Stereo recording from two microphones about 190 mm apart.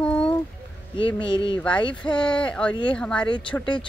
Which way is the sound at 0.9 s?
25° left (ahead or behind).